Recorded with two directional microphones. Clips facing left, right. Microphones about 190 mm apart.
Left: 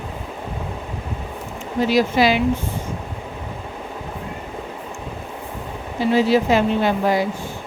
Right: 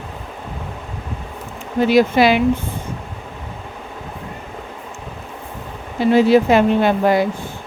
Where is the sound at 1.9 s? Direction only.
60° right (ahead or behind).